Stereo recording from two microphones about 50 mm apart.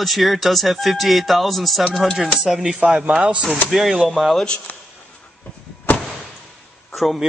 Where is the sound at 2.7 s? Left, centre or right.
Centre.